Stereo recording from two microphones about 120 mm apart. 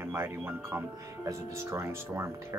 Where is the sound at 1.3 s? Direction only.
25° right (ahead or behind).